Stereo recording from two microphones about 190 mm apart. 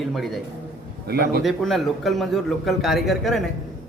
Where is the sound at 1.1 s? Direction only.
55° right (ahead or behind).